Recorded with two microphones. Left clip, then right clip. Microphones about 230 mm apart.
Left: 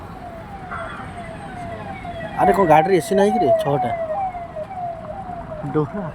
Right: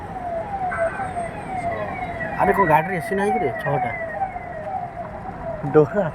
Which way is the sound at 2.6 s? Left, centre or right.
Left.